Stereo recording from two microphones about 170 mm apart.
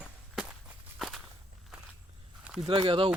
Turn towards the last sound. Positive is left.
turn(degrees=-35)  # may be behind; listen again after turning